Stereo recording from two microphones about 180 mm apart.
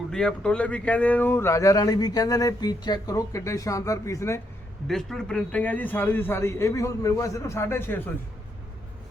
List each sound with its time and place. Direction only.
0.1 s speech: 5° left (ahead or behind)
4.9 s speech: centre (ahead or behind)